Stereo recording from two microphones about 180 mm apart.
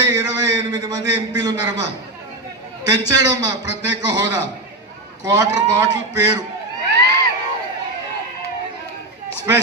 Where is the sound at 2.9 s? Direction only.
20° right (ahead or behind).